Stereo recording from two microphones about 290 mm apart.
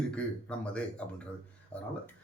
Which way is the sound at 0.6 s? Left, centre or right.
Centre.